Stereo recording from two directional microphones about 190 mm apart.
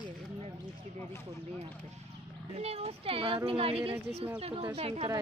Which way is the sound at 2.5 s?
30° right (ahead or behind).